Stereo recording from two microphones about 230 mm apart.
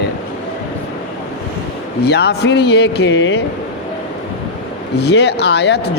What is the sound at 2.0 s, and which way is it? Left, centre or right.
Speech, left.